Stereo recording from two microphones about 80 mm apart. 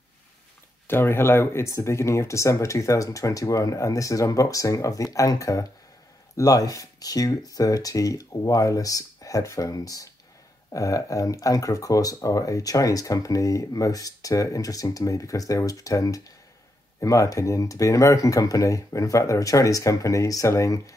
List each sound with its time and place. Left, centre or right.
0.8 s speech: left